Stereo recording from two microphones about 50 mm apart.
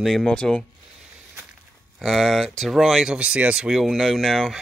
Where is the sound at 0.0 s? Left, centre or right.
Centre.